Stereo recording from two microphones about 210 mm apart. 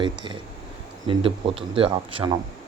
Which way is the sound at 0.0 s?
20° right (ahead or behind).